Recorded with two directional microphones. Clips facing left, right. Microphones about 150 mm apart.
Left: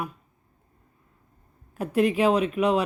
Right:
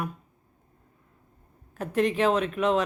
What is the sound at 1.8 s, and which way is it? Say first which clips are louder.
Speech: left 2 dB; 10° left (ahead or behind).